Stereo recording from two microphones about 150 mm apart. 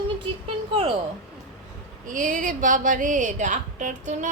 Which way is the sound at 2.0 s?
60° right (ahead or behind).